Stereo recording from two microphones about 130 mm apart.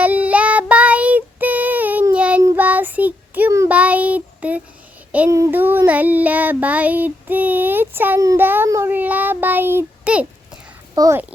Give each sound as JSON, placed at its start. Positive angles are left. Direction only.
{"t": 0.0, "sound": "child singing", "side_deg": -10}
{"t": 10.9, "sound": "speech", "side_deg": -25}